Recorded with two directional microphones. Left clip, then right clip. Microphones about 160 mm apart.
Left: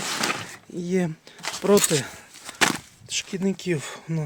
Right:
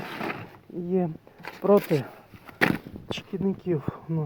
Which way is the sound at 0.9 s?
25° left (ahead or behind).